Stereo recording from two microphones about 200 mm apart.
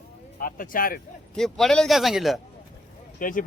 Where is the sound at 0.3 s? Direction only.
45° left (ahead or behind).